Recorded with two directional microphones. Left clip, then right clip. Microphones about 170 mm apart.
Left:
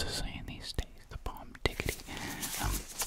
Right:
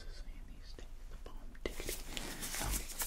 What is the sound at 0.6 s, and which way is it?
Whispering, 60° left (ahead or behind).